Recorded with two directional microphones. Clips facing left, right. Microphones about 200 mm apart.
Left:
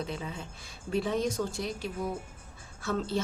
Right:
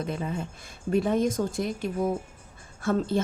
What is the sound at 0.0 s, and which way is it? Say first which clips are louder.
A woman's voice: right 6 dB; 50° right (ahead or behind).